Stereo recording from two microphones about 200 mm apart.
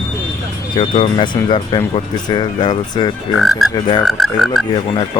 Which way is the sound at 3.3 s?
Centre (ahead or behind).